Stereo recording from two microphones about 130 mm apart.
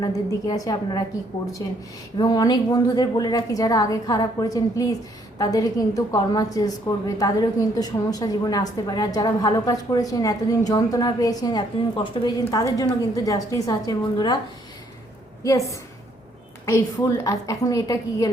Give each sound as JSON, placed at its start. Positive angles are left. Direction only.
{"t": 0.0, "sound": "a woman's voice", "side_deg": 30}
{"t": 2.1, "sound": "a woman's voice", "side_deg": 35}
{"t": 16.6, "sound": "a woman's voice", "side_deg": 25}